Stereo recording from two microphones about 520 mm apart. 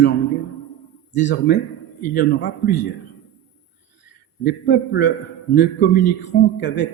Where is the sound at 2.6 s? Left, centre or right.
Centre.